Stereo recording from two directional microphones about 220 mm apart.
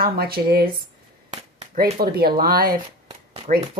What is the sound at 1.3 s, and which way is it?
Speech, 30° right (ahead or behind).